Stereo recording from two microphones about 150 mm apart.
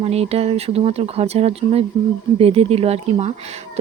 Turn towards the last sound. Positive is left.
turn(degrees=-45)  # may be behind; listen again after turning